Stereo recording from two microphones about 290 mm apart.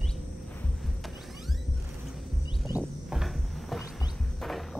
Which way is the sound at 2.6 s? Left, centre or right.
Centre.